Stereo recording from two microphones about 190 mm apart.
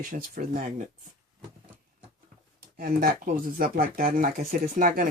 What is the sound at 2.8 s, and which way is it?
Speech, 50° right (ahead or behind).